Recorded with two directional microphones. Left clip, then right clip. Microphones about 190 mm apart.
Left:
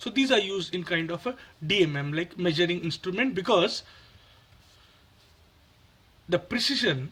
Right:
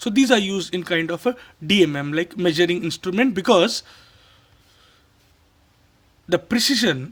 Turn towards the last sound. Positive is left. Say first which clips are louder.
# right 6 dB
turn(degrees=-55)  # may be behind; listen again after turning